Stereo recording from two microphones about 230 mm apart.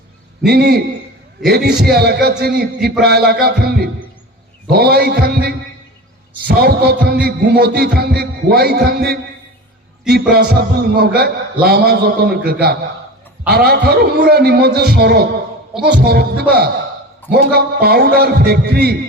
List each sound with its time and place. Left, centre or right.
0.4 s a man's voice: right
10.1 s a man's voice: right
15.7 s a man's voice: centre
16.0 s a man's voice: right